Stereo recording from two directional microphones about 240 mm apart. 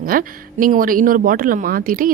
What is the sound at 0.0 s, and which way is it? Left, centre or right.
Speech, right.